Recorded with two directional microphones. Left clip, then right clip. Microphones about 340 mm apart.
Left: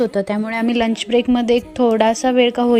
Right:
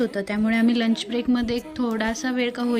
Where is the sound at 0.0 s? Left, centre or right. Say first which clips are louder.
Left 6 dB; centre.